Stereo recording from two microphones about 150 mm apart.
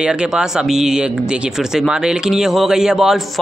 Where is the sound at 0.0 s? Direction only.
5° right (ahead or behind).